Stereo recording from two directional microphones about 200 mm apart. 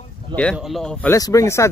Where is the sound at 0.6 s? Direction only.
Centre (ahead or behind).